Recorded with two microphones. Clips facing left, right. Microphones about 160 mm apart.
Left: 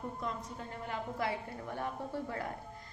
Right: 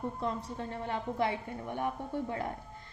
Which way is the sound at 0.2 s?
30° right (ahead or behind).